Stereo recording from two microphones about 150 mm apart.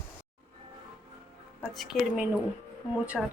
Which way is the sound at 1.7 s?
Centre (ahead or behind).